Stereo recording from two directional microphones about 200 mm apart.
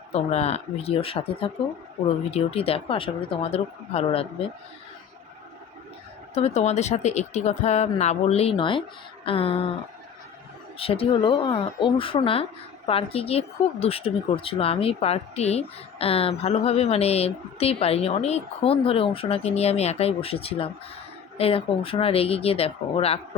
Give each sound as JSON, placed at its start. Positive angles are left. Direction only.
{"t": 0.1, "sound": "speech", "side_deg": 30}
{"t": 6.3, "sound": "speech", "side_deg": 35}
{"t": 10.8, "sound": "speech", "side_deg": 30}